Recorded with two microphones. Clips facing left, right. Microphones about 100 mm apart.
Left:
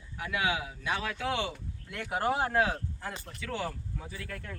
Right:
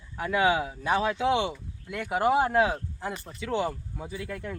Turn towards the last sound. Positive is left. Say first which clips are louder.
# right 7 dB
turn(degrees=-15)  # may be behind; listen again after turning